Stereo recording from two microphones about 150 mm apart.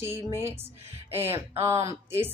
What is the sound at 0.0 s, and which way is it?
A woman's voice, 15° right (ahead or behind).